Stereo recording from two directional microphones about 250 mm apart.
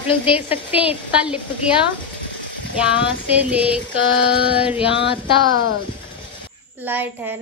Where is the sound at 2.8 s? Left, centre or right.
Centre.